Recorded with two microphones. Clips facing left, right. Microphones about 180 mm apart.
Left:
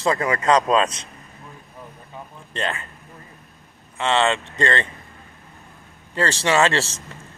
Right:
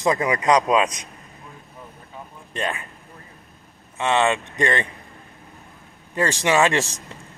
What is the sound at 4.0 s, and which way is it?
Speech, 15° right (ahead or behind).